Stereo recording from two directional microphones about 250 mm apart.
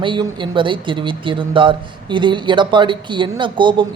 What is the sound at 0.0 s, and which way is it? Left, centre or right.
A man's voice, centre.